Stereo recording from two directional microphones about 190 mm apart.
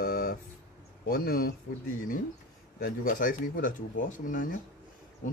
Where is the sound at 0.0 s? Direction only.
55° left (ahead or behind).